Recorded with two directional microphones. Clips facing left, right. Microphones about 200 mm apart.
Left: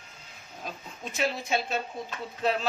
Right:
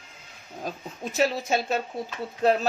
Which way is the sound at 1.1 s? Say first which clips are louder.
Right 4 dB; 40° right (ahead or behind).